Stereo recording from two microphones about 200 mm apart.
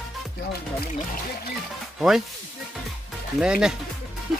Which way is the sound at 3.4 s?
5° right (ahead or behind).